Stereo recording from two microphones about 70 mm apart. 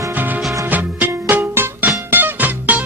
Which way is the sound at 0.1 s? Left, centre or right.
Right.